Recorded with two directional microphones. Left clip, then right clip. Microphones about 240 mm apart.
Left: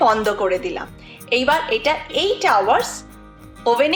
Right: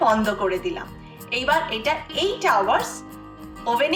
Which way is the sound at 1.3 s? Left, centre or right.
Left.